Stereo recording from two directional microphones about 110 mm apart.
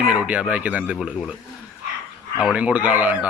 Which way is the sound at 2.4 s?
10° right (ahead or behind).